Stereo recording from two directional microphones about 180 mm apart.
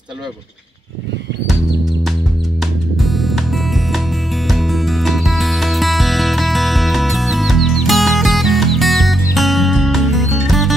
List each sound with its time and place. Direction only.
3.0 s music: centre (ahead or behind)